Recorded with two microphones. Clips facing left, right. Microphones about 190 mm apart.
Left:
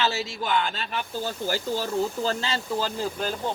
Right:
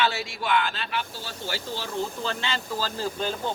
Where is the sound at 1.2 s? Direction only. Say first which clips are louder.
Left 6 dB; 45° left (ahead or behind).